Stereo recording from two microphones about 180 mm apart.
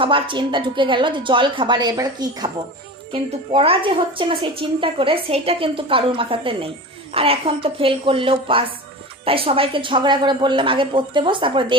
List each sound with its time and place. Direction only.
0.0 s a woman's voice: 30° right (ahead or behind)